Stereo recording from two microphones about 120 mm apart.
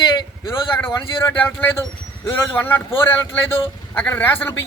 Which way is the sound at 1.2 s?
15° left (ahead or behind).